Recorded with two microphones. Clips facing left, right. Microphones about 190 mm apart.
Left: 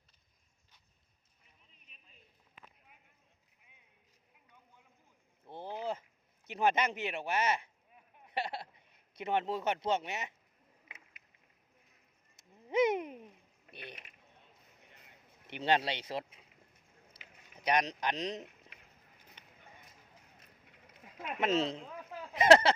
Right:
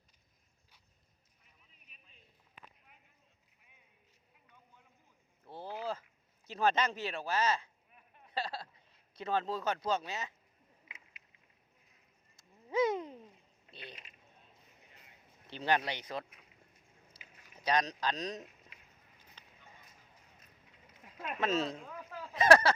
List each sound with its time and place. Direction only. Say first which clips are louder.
5.5 s a sound: left 1 dB; 20° left (ahead or behind)
12.4 s a sound: left 2 dB; 20° left (ahead or behind)
15.4 s speech: left 2 dB; 25° left (ahead or behind)
17.6 s speech: left 1 dB; 20° left (ahead or behind)
19.4 s clip-clop: right 1 dB; 20° left (ahead or behind)
21.2 s speech: left 2 dB; 20° left (ahead or behind)